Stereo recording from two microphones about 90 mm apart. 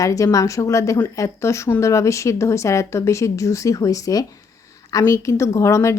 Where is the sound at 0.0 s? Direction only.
40° left (ahead or behind).